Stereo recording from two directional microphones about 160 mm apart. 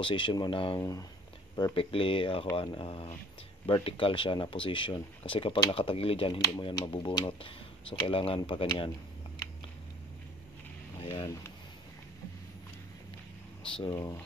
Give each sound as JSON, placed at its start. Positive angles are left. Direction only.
{"t": 0.0, "sound": "speech", "side_deg": 30}
{"t": 0.7, "sound": "speech", "side_deg": 20}
{"t": 1.6, "sound": "speech", "side_deg": 35}
{"t": 13.7, "sound": "speech", "side_deg": 25}